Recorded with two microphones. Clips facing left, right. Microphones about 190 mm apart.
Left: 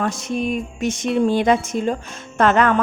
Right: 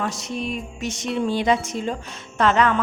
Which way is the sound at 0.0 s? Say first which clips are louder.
Left 5 dB; 50° left (ahead or behind).